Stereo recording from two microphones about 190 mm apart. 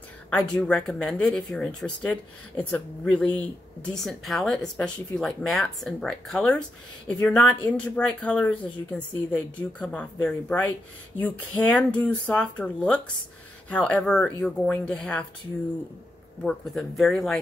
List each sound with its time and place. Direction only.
0.3 s speech: 5° left (ahead or behind)
16.4 s speech: centre (ahead or behind)